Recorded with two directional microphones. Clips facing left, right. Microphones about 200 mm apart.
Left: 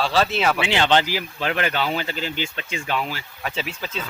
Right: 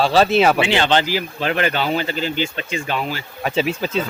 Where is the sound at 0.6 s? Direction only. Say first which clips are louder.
Right 2 dB; 15° left (ahead or behind).